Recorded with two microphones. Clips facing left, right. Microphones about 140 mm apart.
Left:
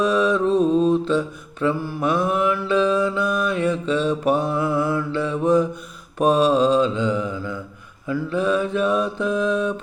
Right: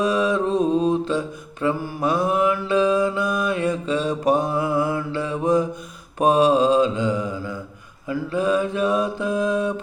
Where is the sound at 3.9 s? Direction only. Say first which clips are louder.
Right 1 dB; 40° right (ahead or behind).